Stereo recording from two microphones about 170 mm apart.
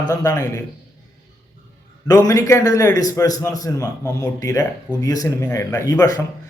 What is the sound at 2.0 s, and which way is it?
A man's voice, 20° left (ahead or behind).